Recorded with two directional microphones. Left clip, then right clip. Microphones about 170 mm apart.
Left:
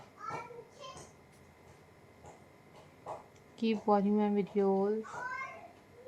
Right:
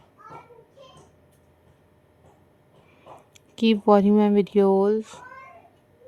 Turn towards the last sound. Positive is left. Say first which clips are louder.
# right 11 dB
turn(degrees=-90)